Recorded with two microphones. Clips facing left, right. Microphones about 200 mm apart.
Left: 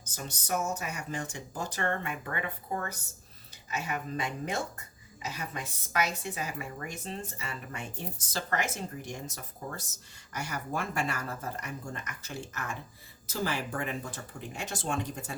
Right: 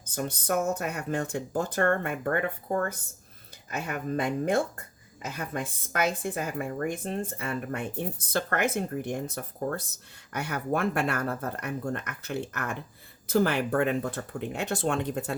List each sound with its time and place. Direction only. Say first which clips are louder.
0.0 s speech: right 9 dB; 55° right (ahead or behind)